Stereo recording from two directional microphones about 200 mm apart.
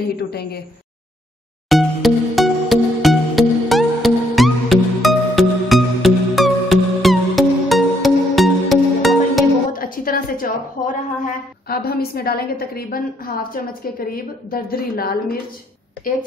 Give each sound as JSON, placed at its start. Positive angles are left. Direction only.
{"t": 0.3, "sound": "a woman's voice", "side_deg": 50}
{"t": 1.7, "sound": "music", "side_deg": 0}
{"t": 9.7, "sound": "a sound", "side_deg": 45}
{"t": 11.6, "sound": "a woman's voice", "side_deg": 50}